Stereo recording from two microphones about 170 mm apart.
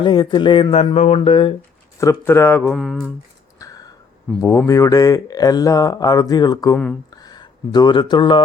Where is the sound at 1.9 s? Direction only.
15° left (ahead or behind).